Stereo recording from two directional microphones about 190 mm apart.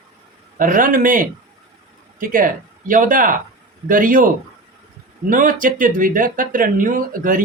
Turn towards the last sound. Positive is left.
turn(degrees=-45)  # may be behind; listen again after turning